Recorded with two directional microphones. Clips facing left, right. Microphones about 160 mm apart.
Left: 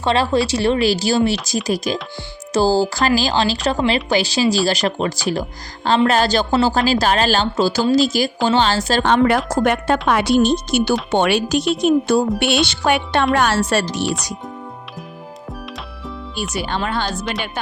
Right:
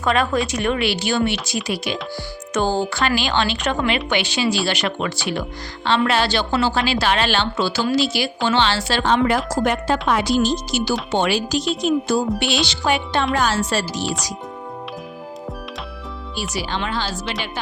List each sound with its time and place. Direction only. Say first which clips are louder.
0.0 s speech: left 2 dB; 30° left (ahead or behind)
9.0 s a woman's voice: left 2 dB; 60° left (ahead or behind)
16.4 s speech: left 3 dB; 50° left (ahead or behind)